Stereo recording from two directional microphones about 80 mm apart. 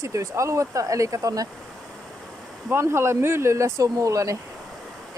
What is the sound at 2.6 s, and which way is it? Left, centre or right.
Speech, right.